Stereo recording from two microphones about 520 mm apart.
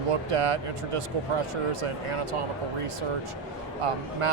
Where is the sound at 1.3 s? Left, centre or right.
Right.